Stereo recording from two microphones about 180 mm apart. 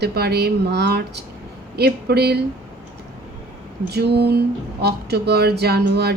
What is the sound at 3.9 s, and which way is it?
Speech, 65° right (ahead or behind).